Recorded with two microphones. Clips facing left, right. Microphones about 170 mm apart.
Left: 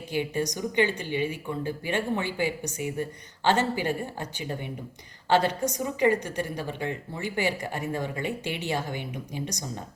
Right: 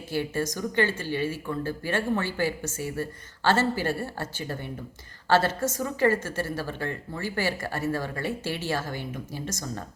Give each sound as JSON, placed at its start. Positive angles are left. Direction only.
{"t": 0.1, "sound": "speech", "side_deg": 15}